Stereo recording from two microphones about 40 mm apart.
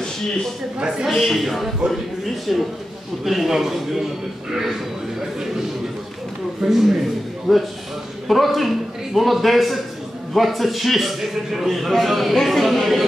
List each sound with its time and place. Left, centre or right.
0.7 s a woman's voice: centre
1.1 s a man's voice: centre
6.7 s a woman's voice: centre